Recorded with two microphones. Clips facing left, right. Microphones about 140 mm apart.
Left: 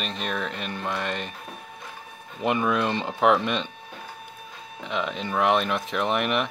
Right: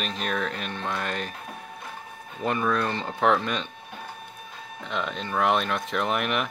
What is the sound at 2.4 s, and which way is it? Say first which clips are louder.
Speech: left 2 dB; 15° left (ahead or behind).